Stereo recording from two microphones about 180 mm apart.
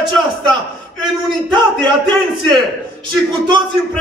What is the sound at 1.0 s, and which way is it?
A man's voice, 25° right (ahead or behind).